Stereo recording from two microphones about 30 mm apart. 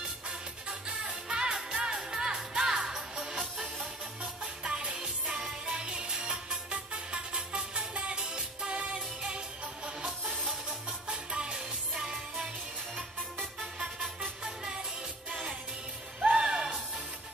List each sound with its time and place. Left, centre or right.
0.7 s music: right
10.2 s music: centre
11.1 s music: right
11.9 s music: centre
14.4 s music: right
16.3 s music: right